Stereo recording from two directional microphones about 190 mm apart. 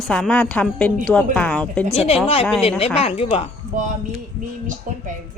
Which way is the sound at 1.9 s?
30° left (ahead or behind).